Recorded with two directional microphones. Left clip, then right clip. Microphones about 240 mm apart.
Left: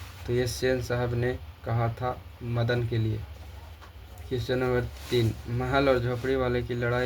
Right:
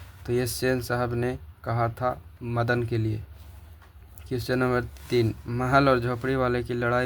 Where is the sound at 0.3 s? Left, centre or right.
Right.